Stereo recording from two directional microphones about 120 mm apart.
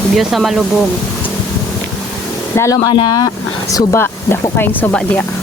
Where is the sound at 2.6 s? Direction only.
25° left (ahead or behind).